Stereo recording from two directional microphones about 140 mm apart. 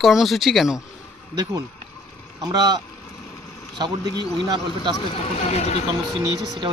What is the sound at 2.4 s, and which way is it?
Speech, 25° right (ahead or behind).